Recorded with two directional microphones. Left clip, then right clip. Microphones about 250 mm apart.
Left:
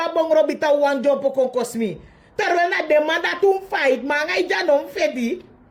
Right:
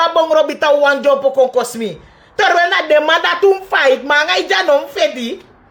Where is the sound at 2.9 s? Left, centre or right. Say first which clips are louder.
Right 7 dB; centre.